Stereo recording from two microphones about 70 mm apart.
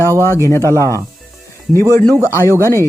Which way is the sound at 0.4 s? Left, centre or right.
Left.